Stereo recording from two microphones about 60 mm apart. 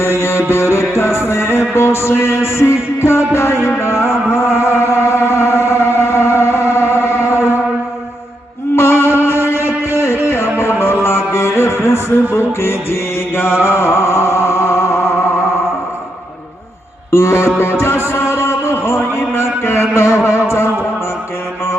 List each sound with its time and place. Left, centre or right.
0.0 s music: left
8.7 s music: left
17.1 s music: left